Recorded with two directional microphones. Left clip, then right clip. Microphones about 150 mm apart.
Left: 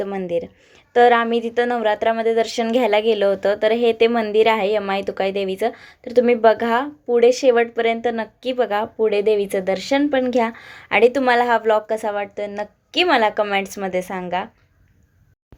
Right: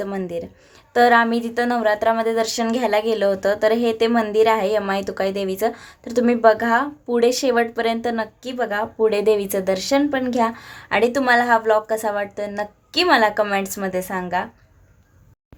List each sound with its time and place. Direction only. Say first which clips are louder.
0.0 s speech: left 3 dB; 15° left (ahead or behind)
9.0 s speech: right 1 dB; 5° left (ahead or behind)